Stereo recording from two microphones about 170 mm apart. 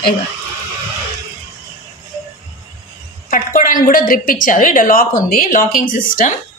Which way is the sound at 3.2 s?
50° left (ahead or behind).